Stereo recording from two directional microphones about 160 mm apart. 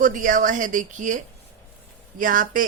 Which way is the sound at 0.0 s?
55° right (ahead or behind).